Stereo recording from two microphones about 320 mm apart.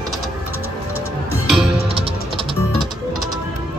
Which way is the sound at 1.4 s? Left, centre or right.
Centre.